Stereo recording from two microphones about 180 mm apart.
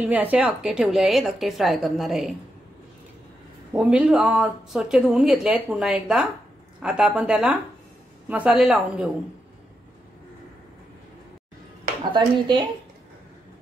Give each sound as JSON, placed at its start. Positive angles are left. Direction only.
{"t": 0.0, "sound": "speech", "side_deg": -10}
{"t": 3.7, "sound": "speech", "side_deg": -5}
{"t": 12.1, "sound": "speech", "side_deg": -25}